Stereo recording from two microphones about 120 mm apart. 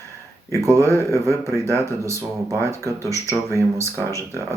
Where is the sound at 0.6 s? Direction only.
25° right (ahead or behind).